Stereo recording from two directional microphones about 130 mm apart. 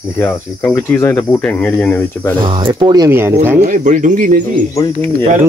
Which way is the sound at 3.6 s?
75° right (ahead or behind).